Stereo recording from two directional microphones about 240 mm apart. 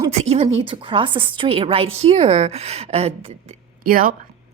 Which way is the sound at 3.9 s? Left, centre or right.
Right.